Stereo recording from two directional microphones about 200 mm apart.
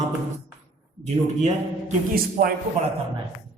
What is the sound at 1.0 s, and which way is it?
A man's voice, 35° right (ahead or behind).